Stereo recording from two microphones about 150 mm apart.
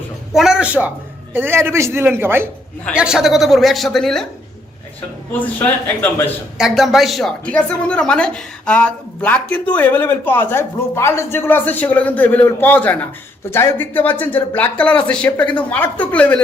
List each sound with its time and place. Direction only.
0.3 s a man's voice: 5° right (ahead or behind)
5.3 s a woman's voice: 10° left (ahead or behind)
6.6 s a woman's voice: centre (ahead or behind)